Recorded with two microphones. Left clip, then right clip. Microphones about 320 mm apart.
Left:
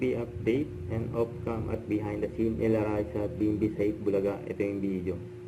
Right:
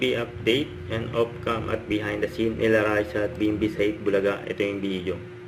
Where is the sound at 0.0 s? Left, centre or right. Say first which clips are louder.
Right 6 dB; centre.